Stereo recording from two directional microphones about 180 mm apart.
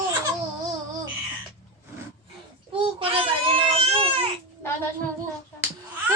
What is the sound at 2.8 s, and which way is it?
Baby cry, 30° right (ahead or behind).